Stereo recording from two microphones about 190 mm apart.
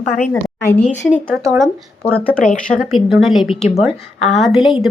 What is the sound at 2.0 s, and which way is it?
A woman's voice, 5° left (ahead or behind).